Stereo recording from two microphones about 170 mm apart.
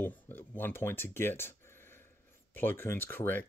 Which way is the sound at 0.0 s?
10° left (ahead or behind).